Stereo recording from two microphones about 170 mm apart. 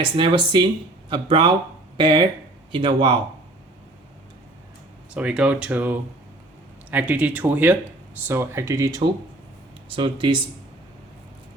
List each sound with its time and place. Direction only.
0.0 s speech: 30° right (ahead or behind)
5.1 s speech: 5° right (ahead or behind)
9.9 s speech: 30° right (ahead or behind)